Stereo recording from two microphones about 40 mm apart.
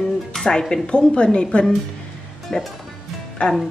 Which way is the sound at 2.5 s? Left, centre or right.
Centre.